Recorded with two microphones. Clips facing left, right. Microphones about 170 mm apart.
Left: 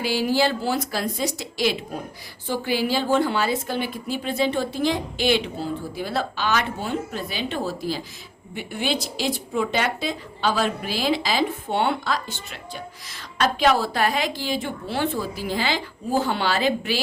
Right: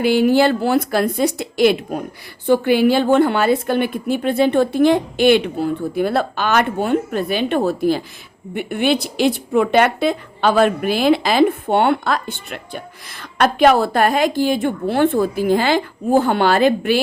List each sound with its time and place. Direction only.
0.0 s a woman's voice: 60° right (ahead or behind)